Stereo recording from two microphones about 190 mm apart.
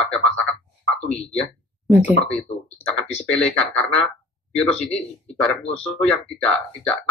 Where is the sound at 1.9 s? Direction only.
10° right (ahead or behind).